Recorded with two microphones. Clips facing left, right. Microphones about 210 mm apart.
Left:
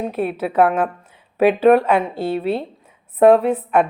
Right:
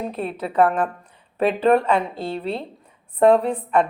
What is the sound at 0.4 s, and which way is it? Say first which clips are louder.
A woman's voice: left 2 dB; 5° left (ahead or behind).